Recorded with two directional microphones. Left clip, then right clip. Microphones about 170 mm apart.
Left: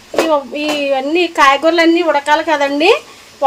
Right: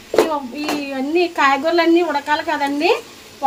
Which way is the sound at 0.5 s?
45° left (ahead or behind).